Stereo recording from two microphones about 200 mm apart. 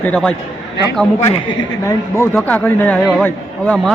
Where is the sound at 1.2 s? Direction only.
30° left (ahead or behind).